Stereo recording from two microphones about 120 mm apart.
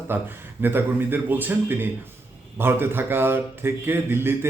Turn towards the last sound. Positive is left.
turn(degrees=-20)  # may be behind; listen again after turning